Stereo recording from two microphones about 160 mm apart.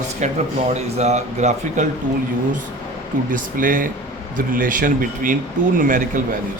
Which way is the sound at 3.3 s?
60° right (ahead or behind).